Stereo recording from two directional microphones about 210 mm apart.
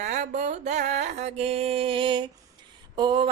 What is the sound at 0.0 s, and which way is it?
Mantra, 35° right (ahead or behind).